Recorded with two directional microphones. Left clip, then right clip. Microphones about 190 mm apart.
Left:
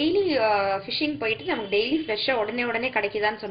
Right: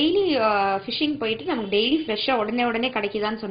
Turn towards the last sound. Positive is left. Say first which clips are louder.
# even
turn(degrees=-40)  # may be behind; listen again after turning